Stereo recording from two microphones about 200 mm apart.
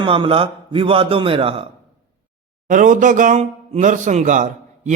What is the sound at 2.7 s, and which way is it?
A man's voice, 40° right (ahead or behind).